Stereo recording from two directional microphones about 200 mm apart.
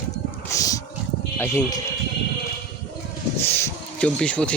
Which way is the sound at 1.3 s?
15° left (ahead or behind).